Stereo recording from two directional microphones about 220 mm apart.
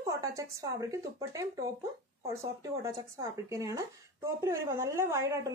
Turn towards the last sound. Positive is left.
turn(degrees=-15)  # may be behind; listen again after turning